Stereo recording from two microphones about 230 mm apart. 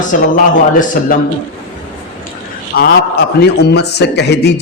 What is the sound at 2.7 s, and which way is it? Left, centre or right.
A man's voice, left.